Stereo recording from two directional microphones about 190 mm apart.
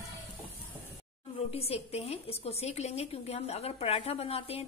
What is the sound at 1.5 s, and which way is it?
A woman's voice, 35° left (ahead or behind).